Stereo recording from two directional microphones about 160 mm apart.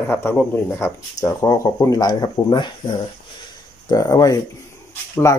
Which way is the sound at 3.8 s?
20° left (ahead or behind).